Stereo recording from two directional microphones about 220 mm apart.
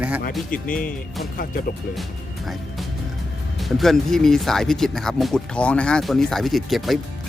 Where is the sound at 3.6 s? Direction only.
Centre (ahead or behind).